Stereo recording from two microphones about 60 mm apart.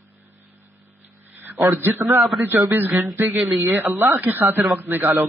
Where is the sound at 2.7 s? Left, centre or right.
Right.